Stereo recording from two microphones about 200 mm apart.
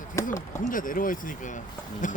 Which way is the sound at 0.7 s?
40° left (ahead or behind).